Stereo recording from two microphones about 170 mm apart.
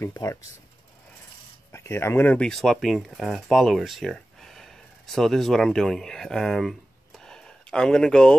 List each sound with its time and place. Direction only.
0.0 s speech: 20° left (ahead or behind)
1.7 s speech: 15° left (ahead or behind)
7.2 s a sound: 5° left (ahead or behind)